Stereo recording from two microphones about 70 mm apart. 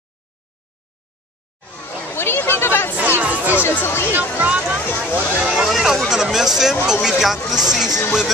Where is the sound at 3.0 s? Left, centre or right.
Right.